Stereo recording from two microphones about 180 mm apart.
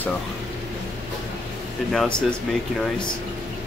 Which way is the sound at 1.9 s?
5° left (ahead or behind).